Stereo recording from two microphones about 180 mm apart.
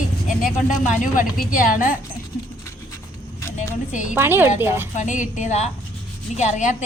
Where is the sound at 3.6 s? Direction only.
45° left (ahead or behind).